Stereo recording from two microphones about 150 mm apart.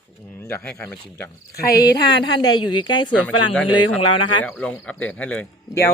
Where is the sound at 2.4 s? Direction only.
30° left (ahead or behind).